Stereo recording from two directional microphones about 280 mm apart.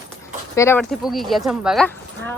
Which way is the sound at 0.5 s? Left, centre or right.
Centre.